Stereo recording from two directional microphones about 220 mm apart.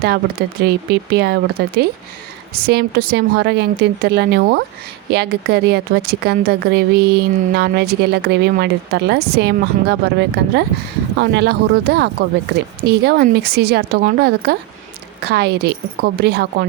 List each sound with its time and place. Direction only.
0.0 s a woman's voice: 45° right (ahead or behind)